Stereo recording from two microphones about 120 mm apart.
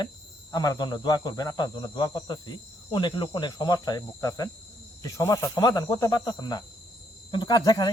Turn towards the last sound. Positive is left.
turn(degrees=35)  # may be behind; listen again after turning